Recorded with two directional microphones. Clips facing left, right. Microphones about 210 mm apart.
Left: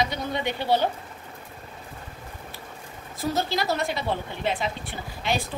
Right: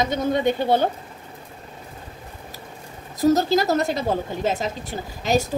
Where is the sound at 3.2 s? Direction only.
40° right (ahead or behind).